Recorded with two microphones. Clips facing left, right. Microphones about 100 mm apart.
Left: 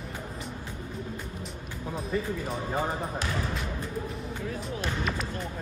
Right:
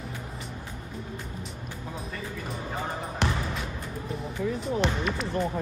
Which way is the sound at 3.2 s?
70° right (ahead or behind).